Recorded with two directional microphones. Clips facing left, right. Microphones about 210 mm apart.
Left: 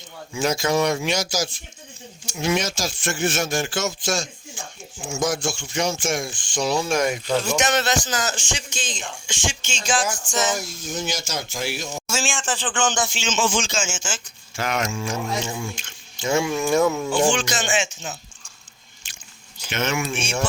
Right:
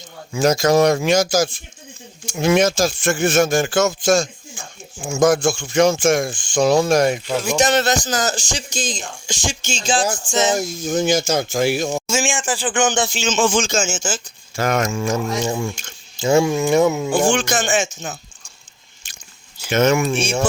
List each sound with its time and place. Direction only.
0.3 s speech: 40° right (ahead or behind)
7.3 s speech: 10° right (ahead or behind)
7.5 s speech: 35° right (ahead or behind)
10.5 s speech: 45° right (ahead or behind)
12.0 s speech: 20° right (ahead or behind)
13.1 s speech: 40° right (ahead or behind)
16.2 s speech: 30° right (ahead or behind)
17.2 s speech: 50° right (ahead or behind)
19.7 s speech: 45° right (ahead or behind)